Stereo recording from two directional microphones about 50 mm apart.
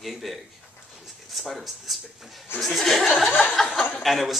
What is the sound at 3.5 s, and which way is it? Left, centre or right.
Chuckle, centre.